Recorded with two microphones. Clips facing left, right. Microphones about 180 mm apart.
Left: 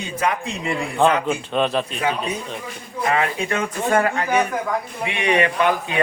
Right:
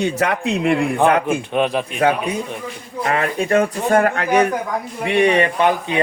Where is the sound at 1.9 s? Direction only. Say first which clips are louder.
Right 6 dB; 60° right (ahead or behind).